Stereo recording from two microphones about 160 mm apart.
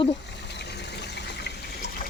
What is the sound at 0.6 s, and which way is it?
Water, 90° left.